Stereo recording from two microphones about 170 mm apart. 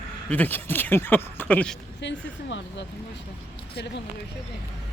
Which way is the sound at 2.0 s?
90° left.